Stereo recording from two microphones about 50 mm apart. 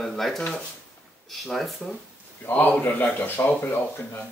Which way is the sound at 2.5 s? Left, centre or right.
Left.